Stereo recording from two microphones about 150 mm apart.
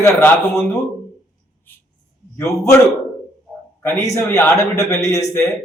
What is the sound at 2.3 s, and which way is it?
Speech, 20° left (ahead or behind).